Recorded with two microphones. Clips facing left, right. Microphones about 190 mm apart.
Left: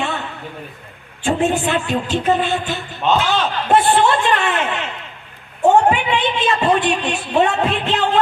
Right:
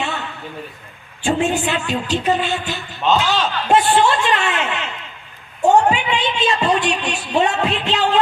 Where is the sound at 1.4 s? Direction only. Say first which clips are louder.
Left 2 dB; 55° left (ahead or behind).